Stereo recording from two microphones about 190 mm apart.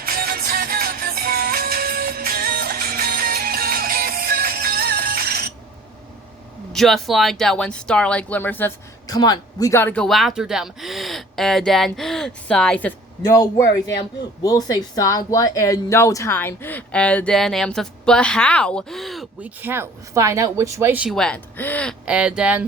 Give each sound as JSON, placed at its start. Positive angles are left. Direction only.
{"t": 0.0, "sound": "music", "side_deg": -50}
{"t": 6.7, "sound": "speech", "side_deg": 0}
{"t": 13.2, "sound": "speech", "side_deg": 20}
{"t": 19.6, "sound": "speech", "side_deg": -15}
{"t": 22.0, "sound": "speech", "side_deg": -5}